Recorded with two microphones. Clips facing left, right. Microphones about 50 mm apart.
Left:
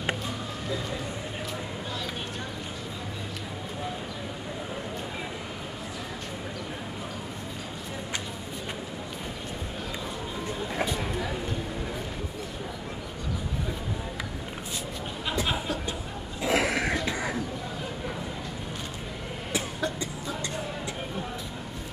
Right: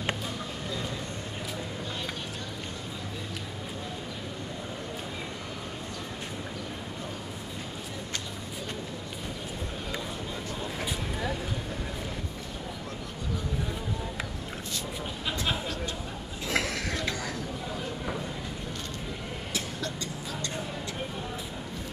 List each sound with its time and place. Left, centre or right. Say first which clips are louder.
16.4 s cough: left 5 dB; centre
19.5 s cough: left 6 dB; centre